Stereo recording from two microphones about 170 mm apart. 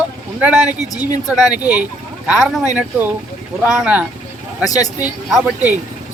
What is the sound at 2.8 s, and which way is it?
Speech, 10° right (ahead or behind).